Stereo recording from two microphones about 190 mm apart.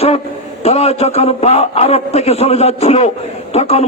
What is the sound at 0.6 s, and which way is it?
A man's voice, 35° left (ahead or behind).